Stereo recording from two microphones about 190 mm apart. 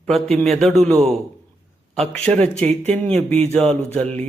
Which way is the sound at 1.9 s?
5° left (ahead or behind).